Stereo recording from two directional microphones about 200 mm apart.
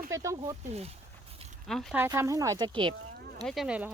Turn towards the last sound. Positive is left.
turn(degrees=-5)  # may be behind; listen again after turning